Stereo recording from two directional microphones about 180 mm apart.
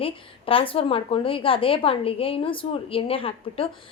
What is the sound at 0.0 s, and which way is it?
A woman's voice, 30° left (ahead or behind).